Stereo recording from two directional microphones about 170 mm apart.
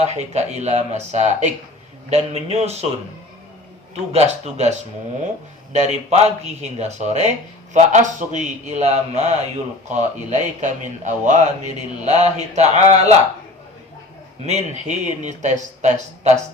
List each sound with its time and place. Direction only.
0.0 s speech: 40° right (ahead or behind)
4.1 s speech: 40° right (ahead or behind)
5.7 s speech: 40° right (ahead or behind)
14.4 s speech: 45° right (ahead or behind)